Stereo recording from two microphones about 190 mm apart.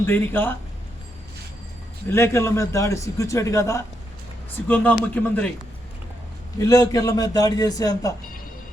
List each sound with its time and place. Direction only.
0.0 s a man's voice: 10° left (ahead or behind)
2.0 s a man's voice: 15° left (ahead or behind)
6.6 s a man's voice: 20° left (ahead or behind)